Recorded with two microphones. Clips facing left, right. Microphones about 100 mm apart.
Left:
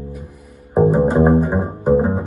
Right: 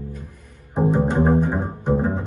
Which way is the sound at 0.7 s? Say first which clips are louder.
Left 6 dB; 40° left (ahead or behind).